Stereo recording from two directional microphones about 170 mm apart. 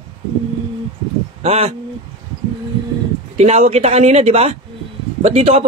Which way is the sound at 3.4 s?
40° right (ahead or behind).